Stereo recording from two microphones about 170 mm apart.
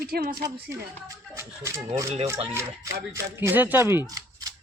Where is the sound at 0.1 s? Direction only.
65° right (ahead or behind).